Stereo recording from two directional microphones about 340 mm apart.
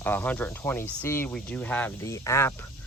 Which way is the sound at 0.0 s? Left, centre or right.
Centre.